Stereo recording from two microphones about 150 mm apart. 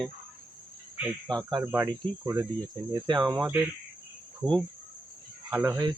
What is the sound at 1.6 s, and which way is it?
Speech, 20° right (ahead or behind).